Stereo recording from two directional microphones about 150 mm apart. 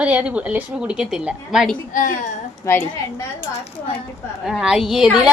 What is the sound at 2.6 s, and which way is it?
Speech, 20° left (ahead or behind).